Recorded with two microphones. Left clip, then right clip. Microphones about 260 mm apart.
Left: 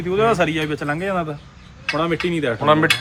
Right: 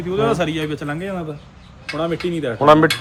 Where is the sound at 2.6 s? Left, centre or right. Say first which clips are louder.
Right 5 dB; centre.